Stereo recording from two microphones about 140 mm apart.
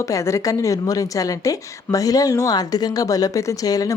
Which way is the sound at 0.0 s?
20° left (ahead or behind).